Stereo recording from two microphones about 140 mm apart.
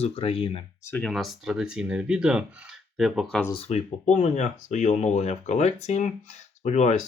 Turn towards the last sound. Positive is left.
turn(degrees=55)  # may be behind; listen again after turning